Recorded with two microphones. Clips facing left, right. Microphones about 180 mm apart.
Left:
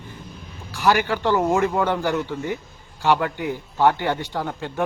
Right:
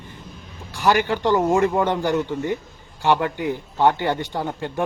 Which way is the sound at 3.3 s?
55° right (ahead or behind).